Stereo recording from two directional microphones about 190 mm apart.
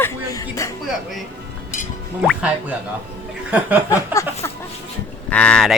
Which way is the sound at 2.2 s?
5° right (ahead or behind).